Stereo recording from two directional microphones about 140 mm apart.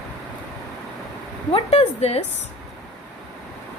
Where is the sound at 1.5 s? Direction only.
50° left (ahead or behind).